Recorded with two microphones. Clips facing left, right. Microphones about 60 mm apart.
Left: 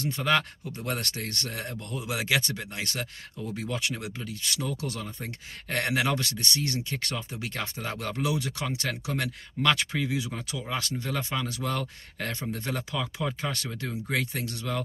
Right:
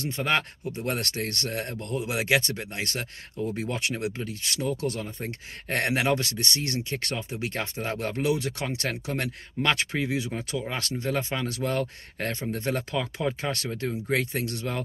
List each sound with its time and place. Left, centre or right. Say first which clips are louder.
0.1 s speech: left 1 dB; right